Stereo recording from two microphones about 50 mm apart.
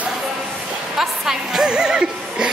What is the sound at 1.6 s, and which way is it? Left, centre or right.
Music, centre.